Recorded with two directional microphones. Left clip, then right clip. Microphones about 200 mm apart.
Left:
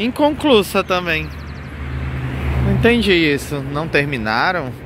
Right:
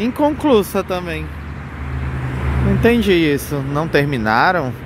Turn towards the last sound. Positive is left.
turn(degrees=-15)  # may be behind; listen again after turning